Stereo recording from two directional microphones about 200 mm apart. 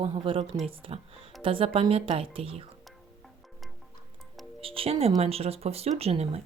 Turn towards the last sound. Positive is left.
turn(degrees=-30)  # may be behind; listen again after turning